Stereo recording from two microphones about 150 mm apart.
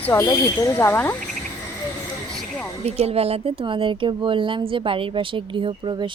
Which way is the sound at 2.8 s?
45° right (ahead or behind).